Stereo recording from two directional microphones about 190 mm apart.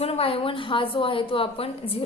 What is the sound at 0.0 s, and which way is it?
A woman's voice, 30° left (ahead or behind).